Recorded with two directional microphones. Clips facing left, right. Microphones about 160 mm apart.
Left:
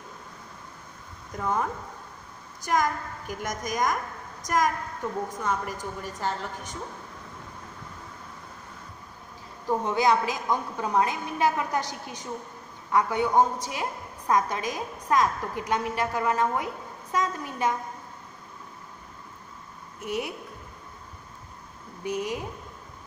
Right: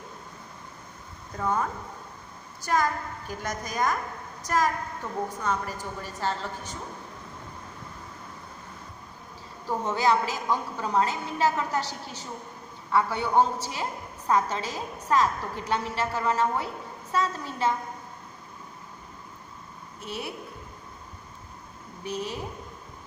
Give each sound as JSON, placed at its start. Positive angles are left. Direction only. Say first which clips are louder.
{"t": 2.6, "sound": "a woman's voice", "louder": "even", "side_deg": 15}
{"t": 9.7, "sound": "a woman's voice", "louder": "left 1 dB", "side_deg": 15}
{"t": 20.0, "sound": "a woman's voice", "louder": "left 5 dB", "side_deg": 15}
{"t": 22.0, "sound": "a woman's voice", "louder": "left 3 dB", "side_deg": 15}